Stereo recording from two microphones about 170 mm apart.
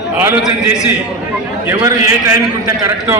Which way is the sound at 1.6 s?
15° right (ahead or behind).